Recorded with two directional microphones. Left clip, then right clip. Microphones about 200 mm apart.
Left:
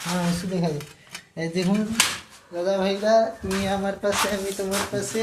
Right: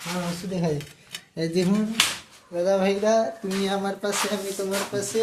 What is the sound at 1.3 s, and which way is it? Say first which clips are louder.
Speech: right 2 dB; 30° right (ahead or behind).